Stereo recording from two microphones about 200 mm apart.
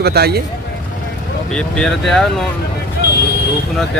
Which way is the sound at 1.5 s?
5° left (ahead or behind).